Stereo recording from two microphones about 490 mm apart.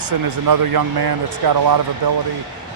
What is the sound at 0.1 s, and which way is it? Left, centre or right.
Speech, right.